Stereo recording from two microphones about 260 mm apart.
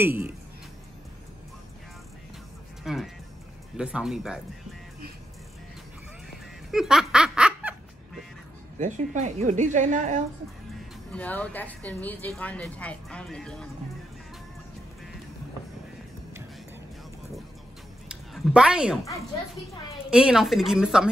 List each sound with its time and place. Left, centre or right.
2.8 s speech: centre
6.7 s snicker: centre
8.7 s a woman's voice: right
11.1 s speech: centre
18.0 s a sound: centre
20.1 s speech: centre